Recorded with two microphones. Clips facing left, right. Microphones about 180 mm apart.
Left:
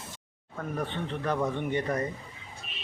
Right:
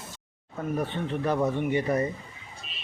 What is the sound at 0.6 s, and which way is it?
Speech, 10° right (ahead or behind).